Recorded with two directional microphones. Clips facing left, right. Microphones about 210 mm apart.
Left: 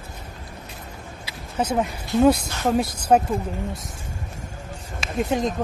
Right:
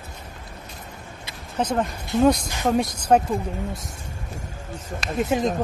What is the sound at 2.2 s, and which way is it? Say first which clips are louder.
A woman's voice: left 1 dB; 5° left (ahead or behind).